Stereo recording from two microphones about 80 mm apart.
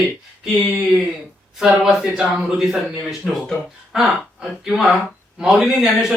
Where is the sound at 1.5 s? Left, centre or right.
Centre.